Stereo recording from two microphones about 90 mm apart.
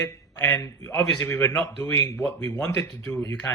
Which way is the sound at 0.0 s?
30° left (ahead or behind).